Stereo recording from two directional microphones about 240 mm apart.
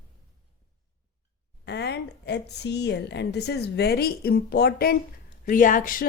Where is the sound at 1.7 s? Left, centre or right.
Left.